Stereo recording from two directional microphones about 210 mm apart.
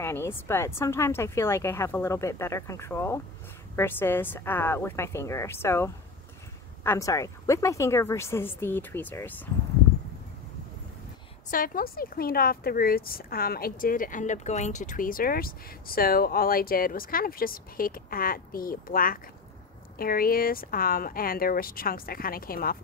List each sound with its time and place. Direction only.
0.0 s a woman's voice: 10° left (ahead or behind)
11.5 s speech: 45° left (ahead or behind)